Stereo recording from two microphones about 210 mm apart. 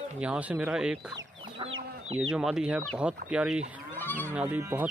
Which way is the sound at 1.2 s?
25° right (ahead or behind).